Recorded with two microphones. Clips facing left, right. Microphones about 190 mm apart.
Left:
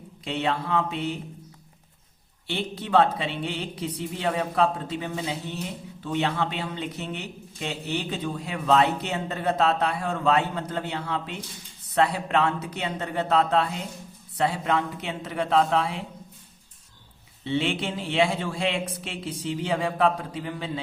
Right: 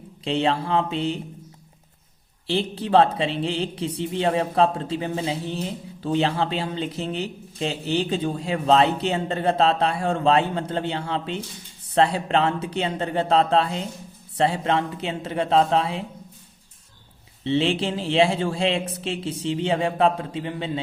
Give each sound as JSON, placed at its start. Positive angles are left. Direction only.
{"t": 0.3, "sound": "a man's voice", "side_deg": -30}
{"t": 2.5, "sound": "a man's voice", "side_deg": -30}
{"t": 17.4, "sound": "a man's voice", "side_deg": -30}